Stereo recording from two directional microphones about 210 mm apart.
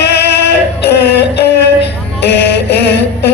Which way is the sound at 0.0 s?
50° left (ahead or behind).